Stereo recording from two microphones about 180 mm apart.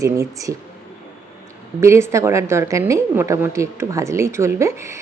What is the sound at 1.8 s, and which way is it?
Speech, 15° right (ahead or behind).